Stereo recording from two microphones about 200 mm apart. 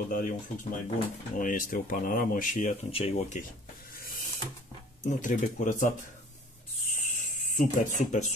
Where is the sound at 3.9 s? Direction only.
50° left (ahead or behind).